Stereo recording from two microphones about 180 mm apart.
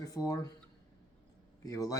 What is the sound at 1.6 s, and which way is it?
Speech, 20° left (ahead or behind).